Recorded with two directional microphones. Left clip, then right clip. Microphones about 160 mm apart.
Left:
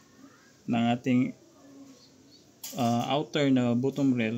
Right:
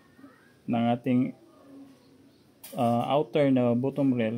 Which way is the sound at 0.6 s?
20° right (ahead or behind).